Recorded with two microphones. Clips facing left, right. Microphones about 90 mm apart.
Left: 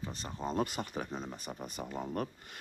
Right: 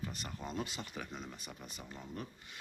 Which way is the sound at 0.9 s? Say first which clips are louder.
Left 6 dB; 35° left (ahead or behind).